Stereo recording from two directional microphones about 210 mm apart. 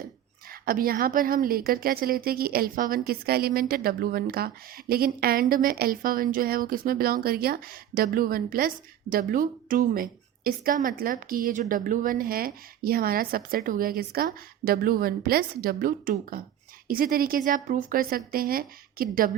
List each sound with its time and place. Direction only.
0.6 s a woman's voice: 45° right (ahead or behind)